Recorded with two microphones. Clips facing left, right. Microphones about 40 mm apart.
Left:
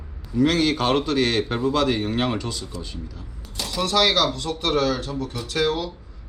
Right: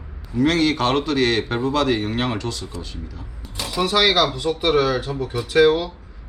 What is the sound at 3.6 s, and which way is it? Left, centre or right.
Speech, centre.